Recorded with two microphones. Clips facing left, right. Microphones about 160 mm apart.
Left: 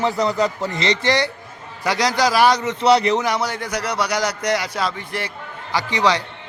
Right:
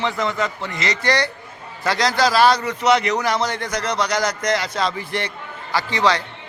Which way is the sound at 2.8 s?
35° left (ahead or behind).